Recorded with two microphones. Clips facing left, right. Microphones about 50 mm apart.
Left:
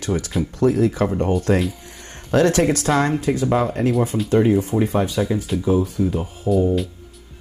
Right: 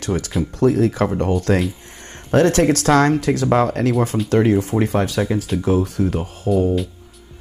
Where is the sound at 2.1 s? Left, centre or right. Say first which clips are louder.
Right 2 dB; right.